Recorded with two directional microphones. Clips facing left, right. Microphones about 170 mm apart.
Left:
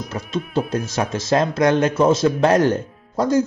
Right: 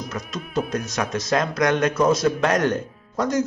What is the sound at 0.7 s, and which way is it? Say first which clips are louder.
Speech: left 3 dB; 30° left (ahead or behind).